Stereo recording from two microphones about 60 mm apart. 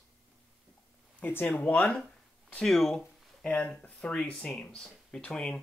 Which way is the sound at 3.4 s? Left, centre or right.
Centre.